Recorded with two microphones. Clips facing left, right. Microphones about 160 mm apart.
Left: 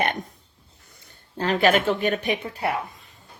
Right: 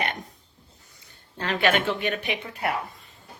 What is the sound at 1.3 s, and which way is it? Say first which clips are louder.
Speech: left 4 dB; 40° left (ahead or behind).